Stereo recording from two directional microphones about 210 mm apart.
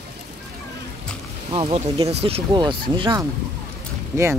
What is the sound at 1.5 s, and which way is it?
Speech, 25° right (ahead or behind).